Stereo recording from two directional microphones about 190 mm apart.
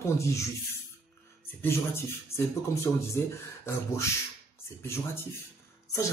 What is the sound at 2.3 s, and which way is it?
Speech, 15° left (ahead or behind).